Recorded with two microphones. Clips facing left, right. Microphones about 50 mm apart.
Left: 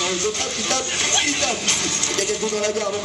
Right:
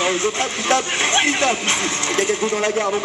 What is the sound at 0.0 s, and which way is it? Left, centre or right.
Speech, right.